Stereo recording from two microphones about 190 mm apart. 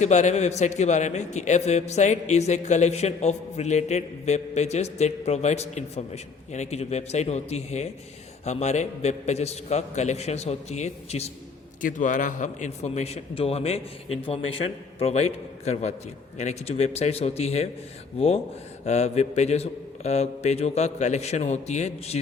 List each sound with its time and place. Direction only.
0.0 s a man's voice: 40° left (ahead or behind)
18.9 s a man's voice: 35° left (ahead or behind)